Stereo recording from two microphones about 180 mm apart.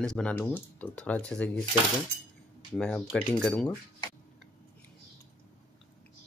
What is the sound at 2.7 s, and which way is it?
Speech, 5° left (ahead or behind).